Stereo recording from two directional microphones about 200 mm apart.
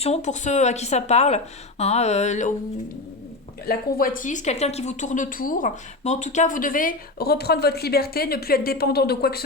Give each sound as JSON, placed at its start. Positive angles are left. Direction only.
{"t": 0.0, "sound": "speech", "side_deg": 35}
{"t": 3.7, "sound": "a woman's voice", "side_deg": 45}